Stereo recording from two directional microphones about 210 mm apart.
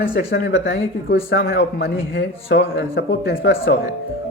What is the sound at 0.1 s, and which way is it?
Speech, 55° left (ahead or behind).